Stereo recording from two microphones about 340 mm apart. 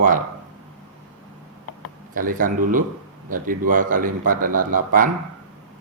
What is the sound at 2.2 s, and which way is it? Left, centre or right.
Speech, right.